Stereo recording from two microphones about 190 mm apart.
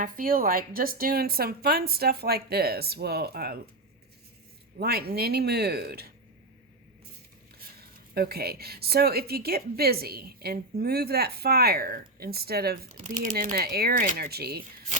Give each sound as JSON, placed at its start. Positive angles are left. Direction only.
{"t": 0.0, "sound": "a woman's voice", "side_deg": -45}
{"t": 4.8, "sound": "speech", "side_deg": -55}
{"t": 7.8, "sound": "a woman's voice", "side_deg": -55}